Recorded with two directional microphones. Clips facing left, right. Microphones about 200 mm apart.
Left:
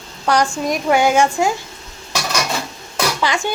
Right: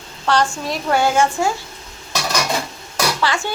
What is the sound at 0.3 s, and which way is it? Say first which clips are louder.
A woman's voice: left 2 dB; 15° left (ahead or behind).